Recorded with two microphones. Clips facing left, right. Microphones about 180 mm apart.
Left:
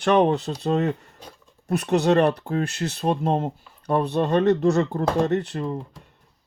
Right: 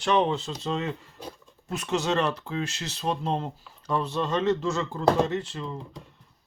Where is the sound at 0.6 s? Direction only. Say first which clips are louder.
Left 9 dB; 50° left (ahead or behind).